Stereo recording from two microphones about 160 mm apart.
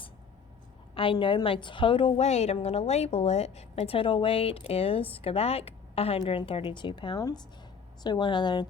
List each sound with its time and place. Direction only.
0.9 s a woman's voice: 30° left (ahead or behind)